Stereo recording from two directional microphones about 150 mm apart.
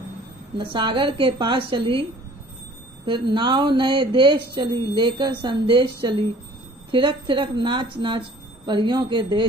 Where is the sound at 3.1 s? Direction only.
35° right (ahead or behind).